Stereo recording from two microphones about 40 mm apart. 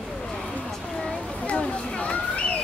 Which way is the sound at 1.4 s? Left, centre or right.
Left.